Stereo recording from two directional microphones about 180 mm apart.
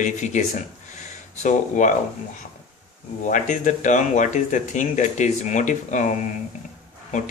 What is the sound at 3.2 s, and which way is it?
Speech, 45° left (ahead or behind).